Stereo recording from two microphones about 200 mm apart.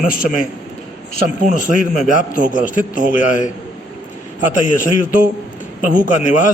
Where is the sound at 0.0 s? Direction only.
45° left (ahead or behind).